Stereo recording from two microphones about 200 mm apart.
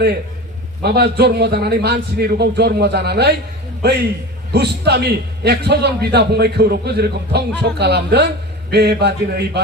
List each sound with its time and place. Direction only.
0.8 s a man's voice: 55° right (ahead or behind)